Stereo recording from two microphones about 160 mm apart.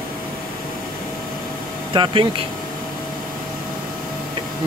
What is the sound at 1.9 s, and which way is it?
Speech, 30° right (ahead or behind).